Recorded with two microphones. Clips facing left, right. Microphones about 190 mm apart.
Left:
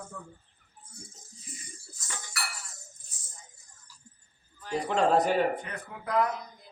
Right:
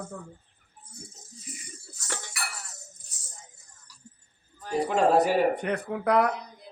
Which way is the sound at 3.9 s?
70° right (ahead or behind).